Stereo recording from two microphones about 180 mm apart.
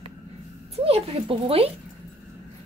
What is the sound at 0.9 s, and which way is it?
Speech, 35° right (ahead or behind).